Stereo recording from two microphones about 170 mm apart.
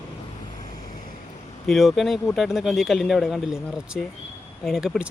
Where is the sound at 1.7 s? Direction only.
Centre (ahead or behind).